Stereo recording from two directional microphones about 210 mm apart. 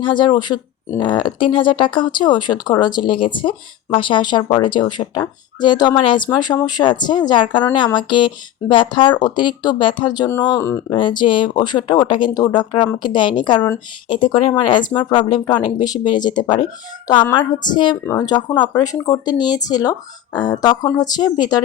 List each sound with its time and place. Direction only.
0.0 s speech: 20° left (ahead or behind)